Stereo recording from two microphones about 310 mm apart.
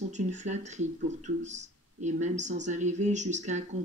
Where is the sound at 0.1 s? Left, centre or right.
Right.